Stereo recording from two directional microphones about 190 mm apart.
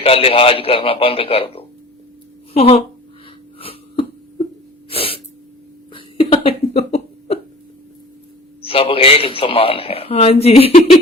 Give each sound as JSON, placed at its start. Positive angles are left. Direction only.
{"t": 0.0, "sound": "a man's voice", "side_deg": 30}
{"t": 3.6, "sound": "a sound", "side_deg": 30}
{"t": 4.9, "sound": "sneeze", "side_deg": 30}
{"t": 5.9, "sound": "hiccup", "side_deg": 30}
{"t": 8.6, "sound": "a man's voice", "side_deg": 30}